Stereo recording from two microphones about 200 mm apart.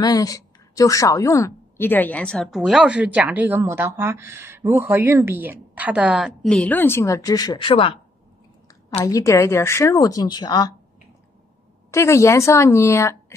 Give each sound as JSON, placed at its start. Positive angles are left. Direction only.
{"t": 0.0, "sound": "a woman's voice", "side_deg": 20}
{"t": 9.0, "sound": "speech", "side_deg": 15}
{"t": 11.9, "sound": "speech", "side_deg": 15}